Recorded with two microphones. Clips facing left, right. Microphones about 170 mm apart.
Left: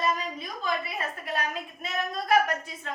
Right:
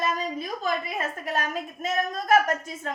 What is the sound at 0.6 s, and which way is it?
A woman's voice, 45° right (ahead or behind).